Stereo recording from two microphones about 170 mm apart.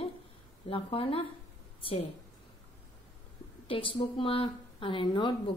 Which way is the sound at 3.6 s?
30° left (ahead or behind).